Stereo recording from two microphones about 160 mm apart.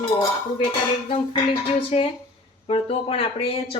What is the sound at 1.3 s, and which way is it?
Speech, 35° left (ahead or behind).